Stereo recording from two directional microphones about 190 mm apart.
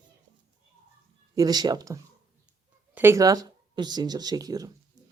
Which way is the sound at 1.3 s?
20° right (ahead or behind).